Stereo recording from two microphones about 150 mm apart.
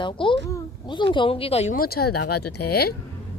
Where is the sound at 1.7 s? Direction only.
85° left.